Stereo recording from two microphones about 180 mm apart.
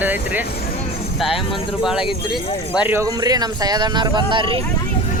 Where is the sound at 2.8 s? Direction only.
15° right (ahead or behind).